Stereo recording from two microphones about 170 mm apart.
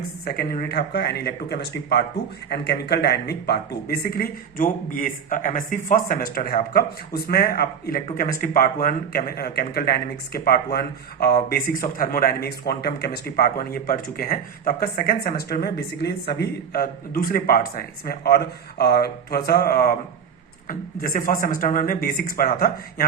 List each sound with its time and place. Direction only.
0.3 s speech: 60° left (ahead or behind)